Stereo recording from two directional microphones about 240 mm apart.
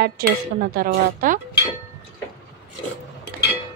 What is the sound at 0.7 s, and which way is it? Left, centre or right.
Speech, right.